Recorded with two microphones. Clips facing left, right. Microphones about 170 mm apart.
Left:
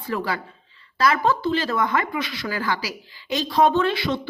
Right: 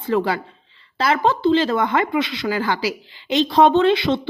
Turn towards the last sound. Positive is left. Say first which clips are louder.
# right 6 dB
turn(degrees=-20)  # may be behind; listen again after turning